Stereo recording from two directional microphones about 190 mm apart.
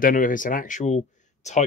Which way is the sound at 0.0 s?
45° left (ahead or behind).